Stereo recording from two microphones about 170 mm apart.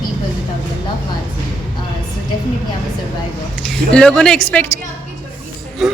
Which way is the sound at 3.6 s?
5° left (ahead or behind).